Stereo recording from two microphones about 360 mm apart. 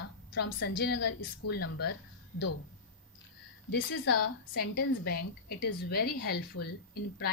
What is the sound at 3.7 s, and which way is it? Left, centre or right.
A woman's voice, left.